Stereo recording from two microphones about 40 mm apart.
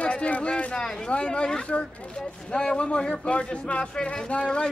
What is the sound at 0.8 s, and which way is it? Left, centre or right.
A man's voice, left.